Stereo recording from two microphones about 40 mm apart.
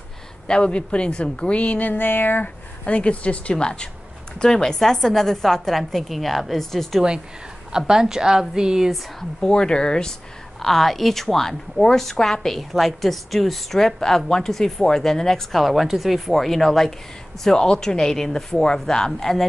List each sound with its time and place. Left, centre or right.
0.5 s a woman's voice: left
1.9 s a sound: left
2.4 s a woman's voice: left; by 7.0 s centre
7.7 s a woman's voice: centre
9.4 s a woman's voice: left
10.6 s a woman's voice: centre
12.7 s a woman's voice: centre
15.6 s a woman's voice: centre